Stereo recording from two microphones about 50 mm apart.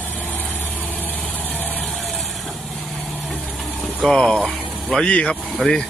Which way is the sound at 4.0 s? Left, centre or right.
Centre.